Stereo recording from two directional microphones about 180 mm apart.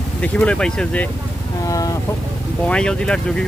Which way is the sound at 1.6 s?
20° left (ahead or behind).